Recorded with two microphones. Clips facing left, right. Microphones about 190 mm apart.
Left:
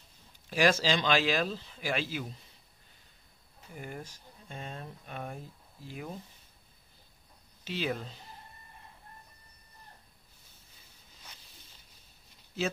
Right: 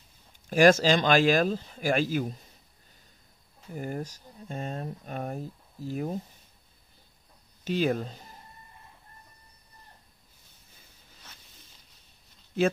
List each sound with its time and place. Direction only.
0.5 s speech: 45° right (ahead or behind)
3.7 s speech: 40° right (ahead or behind)
7.6 s speech: 45° right (ahead or behind)